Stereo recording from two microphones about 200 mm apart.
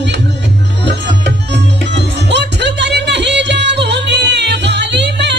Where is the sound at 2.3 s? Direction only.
60° right (ahead or behind).